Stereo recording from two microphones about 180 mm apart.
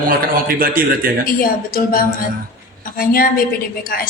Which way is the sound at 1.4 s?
55° left (ahead or behind).